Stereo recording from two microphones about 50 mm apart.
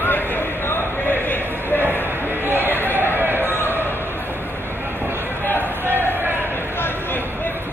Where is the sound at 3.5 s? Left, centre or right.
Left.